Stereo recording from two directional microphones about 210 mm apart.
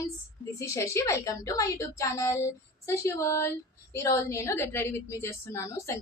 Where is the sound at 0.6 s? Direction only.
15° left (ahead or behind).